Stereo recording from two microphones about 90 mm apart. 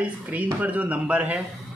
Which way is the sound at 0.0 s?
15° right (ahead or behind).